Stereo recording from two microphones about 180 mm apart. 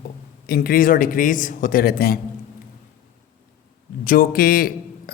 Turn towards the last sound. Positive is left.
turn(degrees=55)  # may be behind; listen again after turning